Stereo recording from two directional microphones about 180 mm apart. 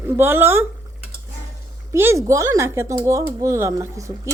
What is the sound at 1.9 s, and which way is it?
Speech, 15° right (ahead or behind).